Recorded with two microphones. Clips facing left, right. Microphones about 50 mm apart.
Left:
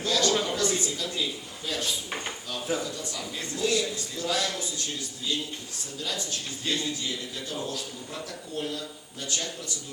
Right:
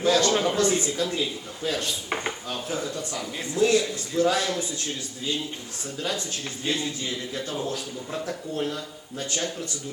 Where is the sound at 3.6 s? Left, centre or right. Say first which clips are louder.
Right 6 dB; right.